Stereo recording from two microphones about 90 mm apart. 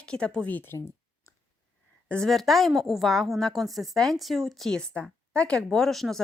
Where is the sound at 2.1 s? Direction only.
5° left (ahead or behind).